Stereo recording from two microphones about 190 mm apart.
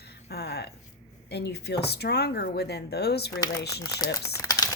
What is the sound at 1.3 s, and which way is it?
Speech, 60° left (ahead or behind).